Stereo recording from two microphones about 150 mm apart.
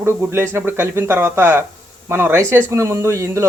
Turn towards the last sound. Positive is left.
turn(degrees=-20)  # may be behind; listen again after turning